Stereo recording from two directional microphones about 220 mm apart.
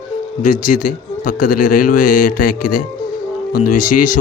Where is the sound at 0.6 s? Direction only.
35° left (ahead or behind).